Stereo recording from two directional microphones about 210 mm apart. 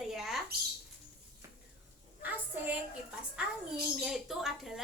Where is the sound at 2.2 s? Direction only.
10° right (ahead or behind).